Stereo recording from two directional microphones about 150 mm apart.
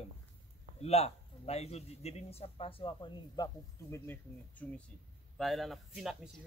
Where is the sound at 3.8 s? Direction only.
15° left (ahead or behind).